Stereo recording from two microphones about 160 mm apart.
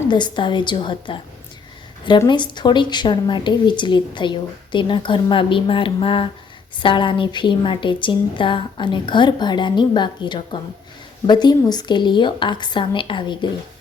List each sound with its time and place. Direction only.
0.1 s a woman's voice: 30° left (ahead or behind)